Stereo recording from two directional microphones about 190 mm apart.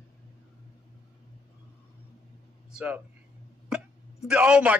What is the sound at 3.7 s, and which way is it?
Hiccup, 5° right (ahead or behind).